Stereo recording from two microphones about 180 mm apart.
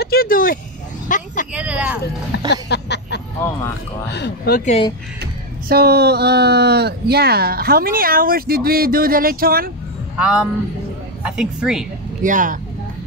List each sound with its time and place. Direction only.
0.0 s a sound: 55° left (ahead or behind)
1.0 s vehicle: 45° left (ahead or behind)
1.5 s vehicle: 5° right (ahead or behind)
2.5 s a sound: 65° left (ahead or behind)
4.1 s speech: 60° left (ahead or behind)
5.2 s speech: 60° right (ahead or behind)
10.1 s speech: 5° right (ahead or behind)
12.2 s speech: 45° right (ahead or behind)